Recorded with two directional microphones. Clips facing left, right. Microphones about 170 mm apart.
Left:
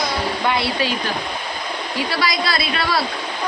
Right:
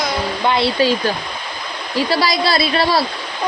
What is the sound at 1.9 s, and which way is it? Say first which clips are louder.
A woman's voice: right 6 dB; 35° right (ahead or behind).